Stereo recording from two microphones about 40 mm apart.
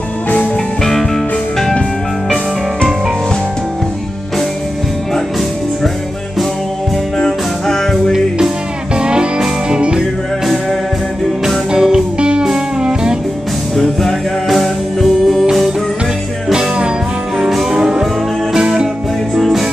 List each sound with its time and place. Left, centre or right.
0.8 s music: centre
7.2 s music: centre
8.9 s music: right
10.4 s music: centre
11.7 s music: centre
14.5 s music: centre
16.5 s music: right
17.5 s music: centre
17.7 s music: centre
19.3 s music: centre